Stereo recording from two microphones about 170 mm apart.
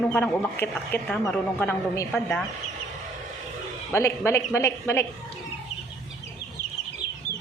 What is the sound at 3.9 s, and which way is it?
Speech, 15° left (ahead or behind).